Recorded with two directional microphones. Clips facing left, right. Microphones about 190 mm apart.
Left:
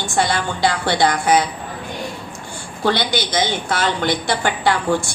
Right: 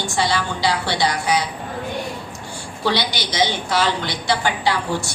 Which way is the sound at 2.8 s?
50° left (ahead or behind).